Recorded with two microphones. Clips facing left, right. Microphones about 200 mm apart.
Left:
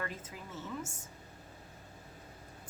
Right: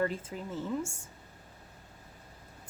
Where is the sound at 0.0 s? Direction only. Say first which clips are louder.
Right 10 dB; 30° right (ahead or behind).